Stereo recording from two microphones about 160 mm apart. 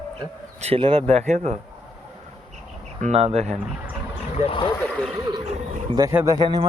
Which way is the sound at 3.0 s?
40° right (ahead or behind).